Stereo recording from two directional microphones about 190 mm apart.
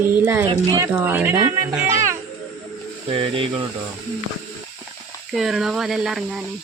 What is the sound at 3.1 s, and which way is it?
Speech, 30° right (ahead or behind).